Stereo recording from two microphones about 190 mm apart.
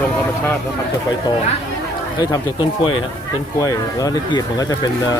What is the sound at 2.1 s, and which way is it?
Speech, 20° left (ahead or behind).